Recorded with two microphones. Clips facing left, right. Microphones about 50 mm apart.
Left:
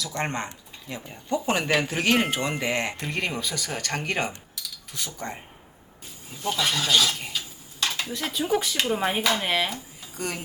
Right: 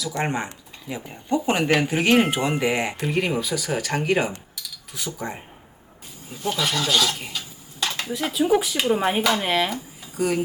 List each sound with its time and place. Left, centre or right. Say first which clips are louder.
0.2 s speech: right 3 dB; centre
1.3 s speech: right 3 dB; right
2.0 s speech: right 5 dB; centre
6.6 s stir: right 1 dB; centre
10.2 s speech: right 9 dB; centre